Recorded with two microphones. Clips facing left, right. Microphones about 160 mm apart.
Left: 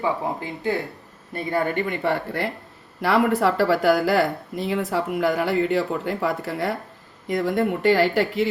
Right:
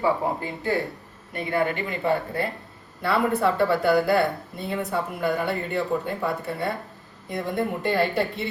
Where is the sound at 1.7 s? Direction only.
70° left (ahead or behind).